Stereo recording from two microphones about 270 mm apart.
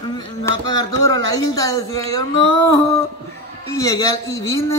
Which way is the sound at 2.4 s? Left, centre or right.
Left.